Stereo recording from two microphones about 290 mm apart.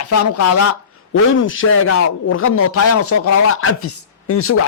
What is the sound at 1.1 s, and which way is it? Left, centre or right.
Speech, left.